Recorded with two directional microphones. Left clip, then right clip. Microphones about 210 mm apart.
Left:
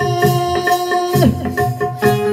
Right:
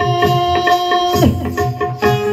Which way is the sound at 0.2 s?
50° left (ahead or behind).